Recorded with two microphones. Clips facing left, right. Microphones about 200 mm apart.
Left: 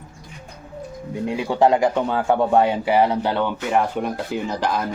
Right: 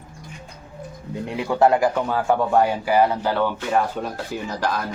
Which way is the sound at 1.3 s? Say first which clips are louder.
Even; 15° left (ahead or behind).